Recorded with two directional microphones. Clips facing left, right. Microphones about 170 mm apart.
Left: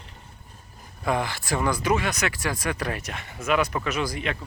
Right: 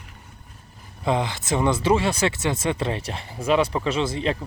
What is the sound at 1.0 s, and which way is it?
Speech, 20° right (ahead or behind).